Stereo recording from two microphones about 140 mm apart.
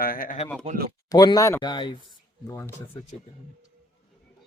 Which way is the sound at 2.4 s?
20° left (ahead or behind).